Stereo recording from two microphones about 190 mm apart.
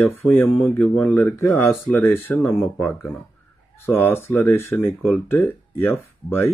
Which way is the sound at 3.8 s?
10° left (ahead or behind).